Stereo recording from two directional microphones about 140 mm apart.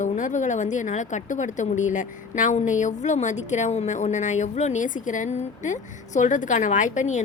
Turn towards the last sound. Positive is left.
turn(degrees=60)  # may be behind; listen again after turning